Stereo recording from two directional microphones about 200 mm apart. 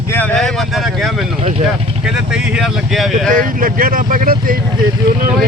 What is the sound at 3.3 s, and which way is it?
Speech, 45° right (ahead or behind).